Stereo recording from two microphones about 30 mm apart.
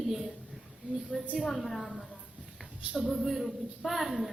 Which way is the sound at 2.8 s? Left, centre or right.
Right.